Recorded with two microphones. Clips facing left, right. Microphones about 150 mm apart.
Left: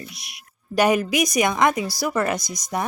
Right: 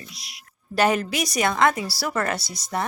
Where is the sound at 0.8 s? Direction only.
15° left (ahead or behind).